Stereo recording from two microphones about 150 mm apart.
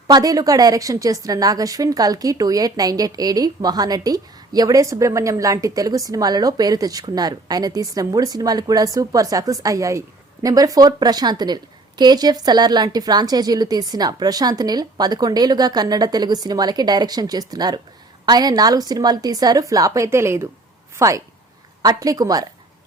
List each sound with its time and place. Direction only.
0.1 s a woman's voice: 25° right (ahead or behind)